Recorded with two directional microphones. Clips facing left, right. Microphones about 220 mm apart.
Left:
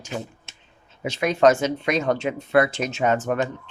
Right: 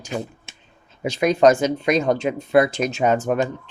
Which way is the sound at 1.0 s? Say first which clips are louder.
Right 3 dB; 40° right (ahead or behind).